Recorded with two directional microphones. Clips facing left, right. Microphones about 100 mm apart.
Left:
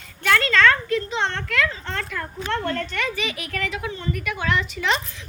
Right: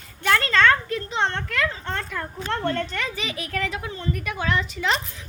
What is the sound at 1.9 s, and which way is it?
Speech, 25° right (ahead or behind).